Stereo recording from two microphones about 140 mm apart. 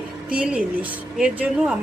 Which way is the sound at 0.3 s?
10° right (ahead or behind).